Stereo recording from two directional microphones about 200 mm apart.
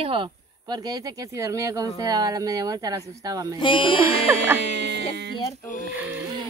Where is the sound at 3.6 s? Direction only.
25° left (ahead or behind).